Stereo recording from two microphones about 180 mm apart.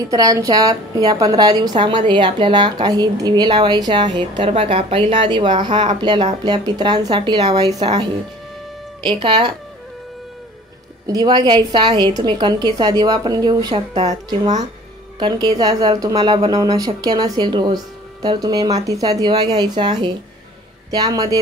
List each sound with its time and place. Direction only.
0.1 s a woman's voice: 20° right (ahead or behind)
5.7 s speech: 40° right (ahead or behind)
5.9 s a woman's voice: 25° right (ahead or behind)
9.2 s a woman's voice: 25° right (ahead or behind)
11.1 s a woman's voice: 25° right (ahead or behind)
15.1 s a woman's voice: 25° right (ahead or behind)